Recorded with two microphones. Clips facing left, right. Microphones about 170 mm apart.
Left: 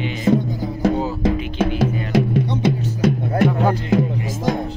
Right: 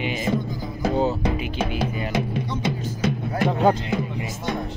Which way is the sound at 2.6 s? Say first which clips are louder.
Left 6 dB; 60° left (ahead or behind).